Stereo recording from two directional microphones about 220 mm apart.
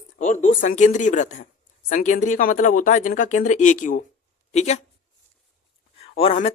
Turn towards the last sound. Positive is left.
turn(degrees=25)  # may be behind; listen again after turning